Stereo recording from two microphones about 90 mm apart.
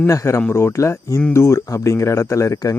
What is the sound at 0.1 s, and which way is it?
Speech, 35° left (ahead or behind).